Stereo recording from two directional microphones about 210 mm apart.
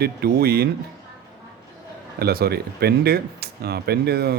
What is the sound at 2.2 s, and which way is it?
Speech, 50° right (ahead or behind).